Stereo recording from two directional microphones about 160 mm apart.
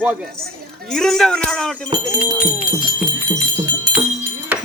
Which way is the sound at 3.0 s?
25° right (ahead or behind).